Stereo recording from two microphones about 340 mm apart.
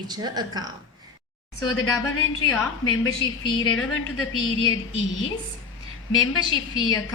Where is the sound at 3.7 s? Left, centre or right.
Left.